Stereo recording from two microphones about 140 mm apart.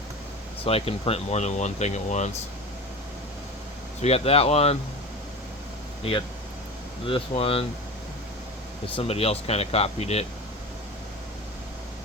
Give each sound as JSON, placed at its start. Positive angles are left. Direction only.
{"t": 0.6, "sound": "speech", "side_deg": 45}
{"t": 4.0, "sound": "speech", "side_deg": 45}
{"t": 7.0, "sound": "speech", "side_deg": 40}
{"t": 9.0, "sound": "speech", "side_deg": 45}